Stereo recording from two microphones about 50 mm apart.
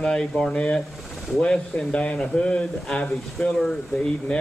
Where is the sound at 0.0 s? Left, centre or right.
Centre.